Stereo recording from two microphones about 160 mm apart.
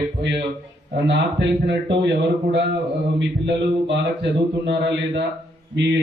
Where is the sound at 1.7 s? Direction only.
90° right.